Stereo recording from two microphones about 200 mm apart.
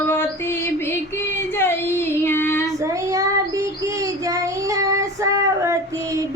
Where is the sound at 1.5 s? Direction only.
10° left (ahead or behind).